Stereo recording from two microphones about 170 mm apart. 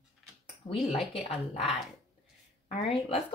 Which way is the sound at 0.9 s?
Centre (ahead or behind).